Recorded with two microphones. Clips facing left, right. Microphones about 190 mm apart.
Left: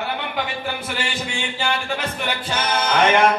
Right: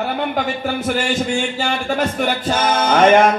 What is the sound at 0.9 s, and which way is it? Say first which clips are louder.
Music: right 8 dB; 45° right (ahead or behind).